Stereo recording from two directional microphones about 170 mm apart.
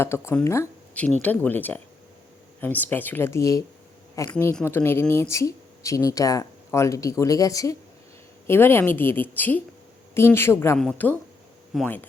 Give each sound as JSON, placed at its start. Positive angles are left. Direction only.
{"t": 0.0, "sound": "speech", "side_deg": 15}